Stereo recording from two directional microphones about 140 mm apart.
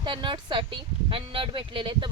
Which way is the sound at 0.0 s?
35° right (ahead or behind).